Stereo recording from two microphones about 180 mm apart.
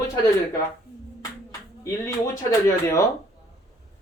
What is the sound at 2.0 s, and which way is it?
Speech, 15° left (ahead or behind).